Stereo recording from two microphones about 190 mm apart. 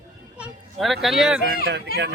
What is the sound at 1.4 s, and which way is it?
Speech, 60° right (ahead or behind).